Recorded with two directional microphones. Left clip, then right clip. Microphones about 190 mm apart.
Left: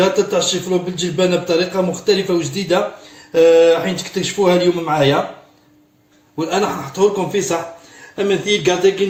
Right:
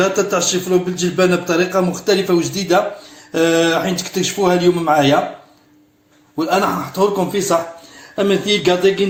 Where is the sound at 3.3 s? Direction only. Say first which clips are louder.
Left 5 dB; 40° right (ahead or behind).